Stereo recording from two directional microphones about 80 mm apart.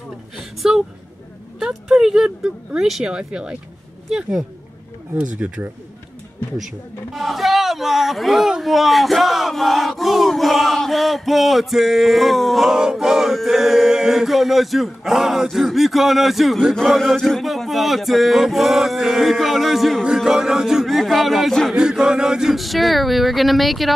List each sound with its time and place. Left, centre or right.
0.4 s a sound: centre
1.6 s speech: centre
5.1 s speech: centre
7.2 s speech: centre
21.7 s speech: centre